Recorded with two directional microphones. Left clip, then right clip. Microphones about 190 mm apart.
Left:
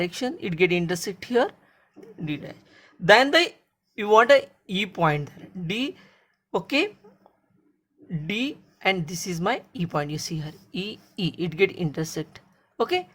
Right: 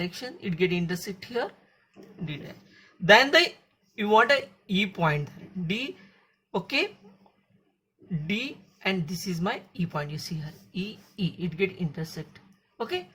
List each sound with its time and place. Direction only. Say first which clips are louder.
0.0 s speech: left 7 dB; 40° left (ahead or behind)
8.3 s speech: left 3 dB; 35° left (ahead or behind)